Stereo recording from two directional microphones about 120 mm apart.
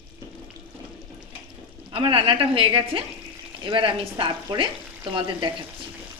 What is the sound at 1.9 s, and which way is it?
A woman's voice, 50° right (ahead or behind).